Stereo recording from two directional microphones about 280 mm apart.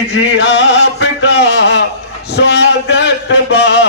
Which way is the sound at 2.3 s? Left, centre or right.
Left.